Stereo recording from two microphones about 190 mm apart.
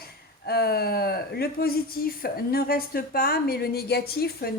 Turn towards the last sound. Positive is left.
turn(degrees=55)  # may be behind; listen again after turning